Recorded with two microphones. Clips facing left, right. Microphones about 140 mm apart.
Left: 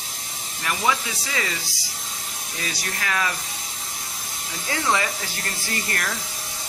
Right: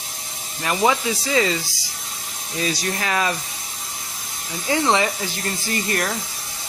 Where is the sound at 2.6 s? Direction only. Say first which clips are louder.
Right 7 dB; 25° right (ahead or behind).